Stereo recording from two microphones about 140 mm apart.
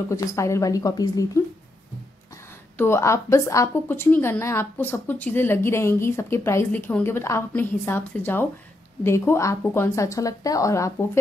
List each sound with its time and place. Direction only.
0.1 s a woman's voice: 20° left (ahead or behind)
2.8 s a woman's voice: 20° left (ahead or behind)